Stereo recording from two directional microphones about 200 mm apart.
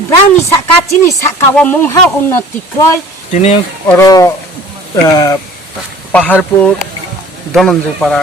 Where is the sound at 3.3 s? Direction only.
30° left (ahead or behind).